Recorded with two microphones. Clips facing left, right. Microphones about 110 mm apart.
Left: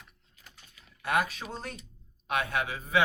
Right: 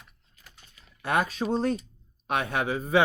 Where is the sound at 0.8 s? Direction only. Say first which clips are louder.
Right 2 dB; 30° right (ahead or behind).